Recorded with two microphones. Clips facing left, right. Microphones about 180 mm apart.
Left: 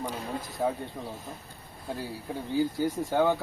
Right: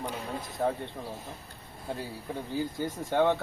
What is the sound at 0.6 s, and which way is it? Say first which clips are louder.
Speech: even; 5° left (ahead or behind).